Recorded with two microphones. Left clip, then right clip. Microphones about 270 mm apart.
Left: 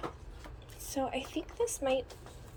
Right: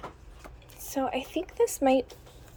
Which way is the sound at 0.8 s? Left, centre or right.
Centre.